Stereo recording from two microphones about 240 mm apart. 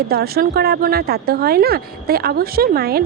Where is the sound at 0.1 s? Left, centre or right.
Right.